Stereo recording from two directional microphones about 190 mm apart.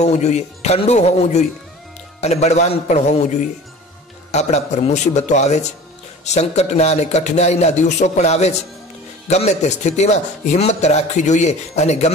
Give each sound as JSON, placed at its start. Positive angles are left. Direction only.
{"t": 0.0, "sound": "a man's voice", "side_deg": 35}